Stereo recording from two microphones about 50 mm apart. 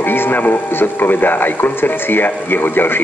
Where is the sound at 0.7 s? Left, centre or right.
Left.